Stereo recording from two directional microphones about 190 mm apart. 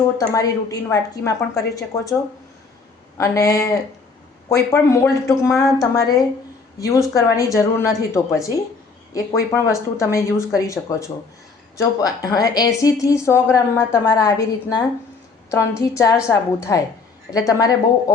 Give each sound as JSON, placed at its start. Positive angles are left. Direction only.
{"t": 0.2, "sound": "a woman's voice", "side_deg": 20}
{"t": 3.2, "sound": "a woman's voice", "side_deg": 20}
{"t": 15.8, "sound": "a woman's voice", "side_deg": 20}